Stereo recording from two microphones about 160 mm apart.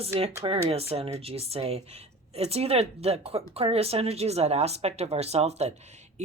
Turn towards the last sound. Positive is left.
turn(degrees=-45)  # may be behind; listen again after turning